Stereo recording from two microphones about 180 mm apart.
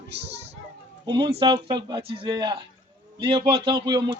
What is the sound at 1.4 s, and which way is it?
Male singing, 25° right (ahead or behind).